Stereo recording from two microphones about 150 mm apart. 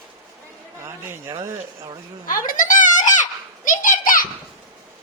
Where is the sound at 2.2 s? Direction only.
65° left (ahead or behind).